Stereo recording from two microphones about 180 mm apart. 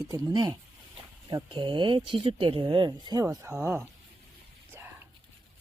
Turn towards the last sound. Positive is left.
turn(degrees=-10)  # may be behind; listen again after turning